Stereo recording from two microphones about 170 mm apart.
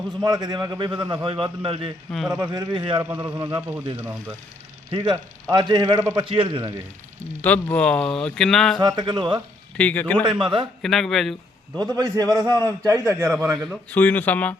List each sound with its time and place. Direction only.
0.2 s a man's voice: 25° right (ahead or behind)
4.9 s a man's voice: 30° right (ahead or behind)
7.4 s speech: 10° left (ahead or behind)
8.8 s a man's voice: 25° right (ahead or behind)
9.7 s speech: 10° left (ahead or behind)
10.4 s a man's voice: 30° right (ahead or behind)
10.8 s a man's voice: centre (ahead or behind)
11.8 s a man's voice: 25° right (ahead or behind)
13.3 s speech: centre (ahead or behind)